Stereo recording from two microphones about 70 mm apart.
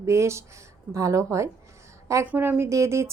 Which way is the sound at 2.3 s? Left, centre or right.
Right.